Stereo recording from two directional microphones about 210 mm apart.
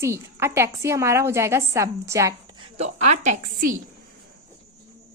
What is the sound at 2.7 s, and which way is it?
A woman's voice, 30° right (ahead or behind).